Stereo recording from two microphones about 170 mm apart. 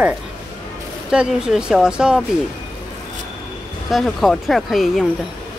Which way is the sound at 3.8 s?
Centre (ahead or behind).